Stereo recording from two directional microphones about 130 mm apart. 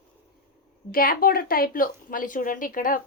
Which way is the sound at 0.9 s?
90° left.